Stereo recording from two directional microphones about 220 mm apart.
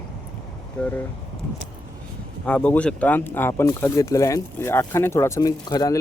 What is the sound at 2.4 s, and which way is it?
Speech, 5° left (ahead or behind).